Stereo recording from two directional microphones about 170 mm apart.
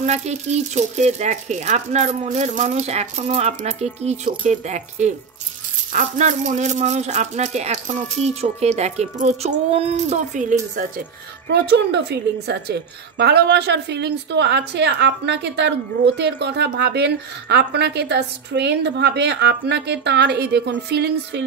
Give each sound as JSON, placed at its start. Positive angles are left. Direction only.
{"t": 0.0, "sound": "speech", "side_deg": -40}
{"t": 11.4, "sound": "a woman's voice", "side_deg": -80}